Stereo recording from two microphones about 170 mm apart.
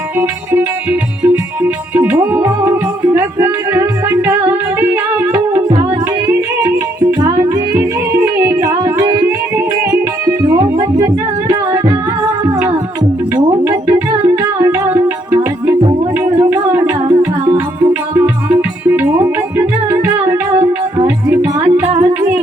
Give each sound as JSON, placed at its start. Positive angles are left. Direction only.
{"t": 0.2, "sound": "music", "side_deg": -10}
{"t": 5.3, "sound": "music", "side_deg": -20}
{"t": 8.4, "sound": "music", "side_deg": -15}
{"t": 10.2, "sound": "music", "side_deg": -20}
{"t": 13.3, "sound": "music", "side_deg": -15}